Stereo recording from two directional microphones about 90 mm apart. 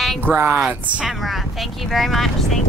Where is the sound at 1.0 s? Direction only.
Centre (ahead or behind).